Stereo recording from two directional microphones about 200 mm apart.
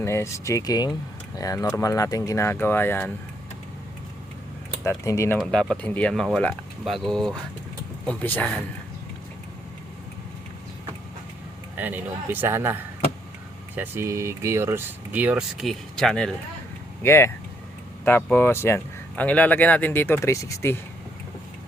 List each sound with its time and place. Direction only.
0.0 s speech: 15° left (ahead or behind)
4.8 s speech: 15° left (ahead or behind)
5.4 s speech: centre (ahead or behind)
11.8 s speech: 10° right (ahead or behind); by 20.7 s 15° left (ahead or behind)